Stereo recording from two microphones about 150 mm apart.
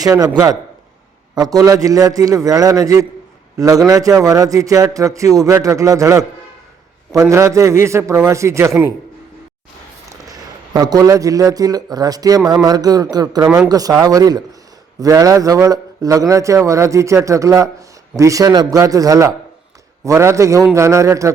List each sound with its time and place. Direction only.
0.0 s a man's voice: 25° right (ahead or behind)
10.2 s a man's voice: 25° right (ahead or behind)